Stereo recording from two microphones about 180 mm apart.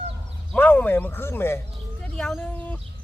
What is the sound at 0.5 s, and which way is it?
Speech, 10° left (ahead or behind).